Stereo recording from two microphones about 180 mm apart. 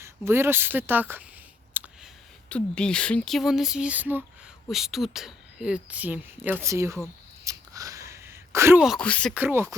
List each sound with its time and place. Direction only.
0.0 s speech: 15° right (ahead or behind)
1.7 s clicking: 10° right (ahead or behind)
2.5 s speech: 5° left (ahead or behind); by 7.0 s 15° right (ahead or behind)
7.4 s a sound: 20° right (ahead or behind)
8.8 s speech: centre (ahead or behind)
9.3 s speech: 10° right (ahead or behind)